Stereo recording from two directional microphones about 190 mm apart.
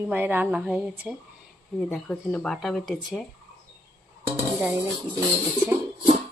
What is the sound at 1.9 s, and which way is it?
Speech, 5° left (ahead or behind).